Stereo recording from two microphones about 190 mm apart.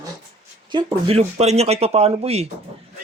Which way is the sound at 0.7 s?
25° right (ahead or behind).